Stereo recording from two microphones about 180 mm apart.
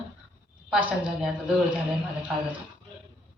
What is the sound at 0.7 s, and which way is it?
Speech, 5° right (ahead or behind).